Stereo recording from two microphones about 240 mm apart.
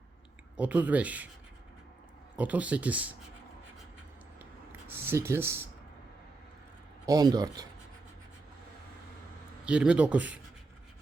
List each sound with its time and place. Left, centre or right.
0.5 s speech: centre
2.3 s speech: centre
4.4 s a sound: centre
7.0 s speech: centre
9.6 s speech: centre